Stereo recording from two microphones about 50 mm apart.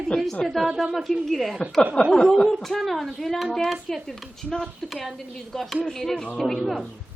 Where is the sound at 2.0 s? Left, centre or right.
Left.